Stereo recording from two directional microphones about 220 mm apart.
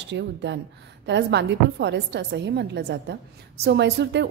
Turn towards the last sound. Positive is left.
turn(degrees=-50)  # may be behind; listen again after turning